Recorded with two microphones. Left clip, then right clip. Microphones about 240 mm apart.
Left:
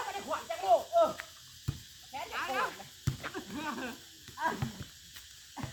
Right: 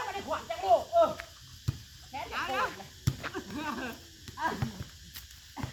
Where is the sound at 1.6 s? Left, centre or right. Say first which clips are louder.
Right 2 dB; centre.